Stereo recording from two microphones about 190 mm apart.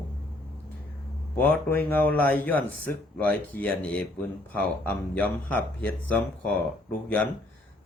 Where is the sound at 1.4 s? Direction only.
10° left (ahead or behind).